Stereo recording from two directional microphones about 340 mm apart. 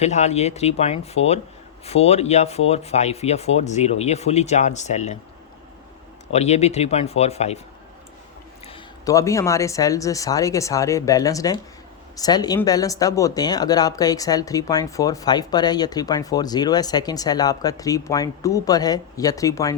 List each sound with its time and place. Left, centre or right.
0.0 s speech: centre
6.3 s speech: centre
8.6 s speech: centre